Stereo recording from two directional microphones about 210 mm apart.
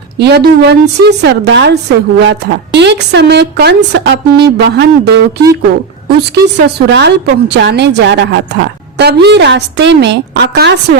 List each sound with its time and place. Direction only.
0.2 s a woman's voice: 50° right (ahead or behind)
6.6 s a woman's voice: 55° right (ahead or behind)